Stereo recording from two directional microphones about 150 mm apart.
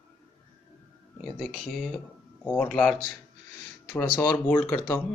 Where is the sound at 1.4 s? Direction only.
5° left (ahead or behind).